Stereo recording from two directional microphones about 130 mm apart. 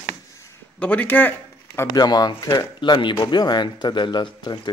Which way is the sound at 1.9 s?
30° left (ahead or behind).